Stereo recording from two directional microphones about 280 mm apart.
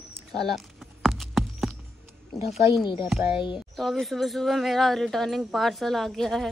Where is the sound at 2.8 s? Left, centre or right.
Centre.